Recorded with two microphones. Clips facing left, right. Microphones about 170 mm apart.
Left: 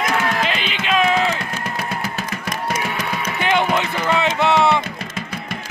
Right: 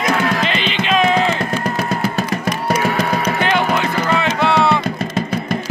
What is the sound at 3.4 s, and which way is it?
Run, 20° left (ahead or behind).